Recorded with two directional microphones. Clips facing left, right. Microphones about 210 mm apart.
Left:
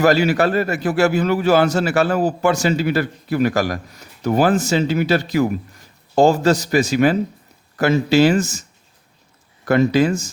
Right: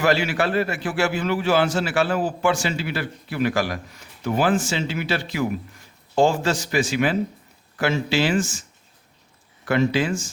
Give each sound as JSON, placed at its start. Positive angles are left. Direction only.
{"t": 0.0, "sound": "a man's voice", "side_deg": 40}
{"t": 9.6, "sound": "a man's voice", "side_deg": 40}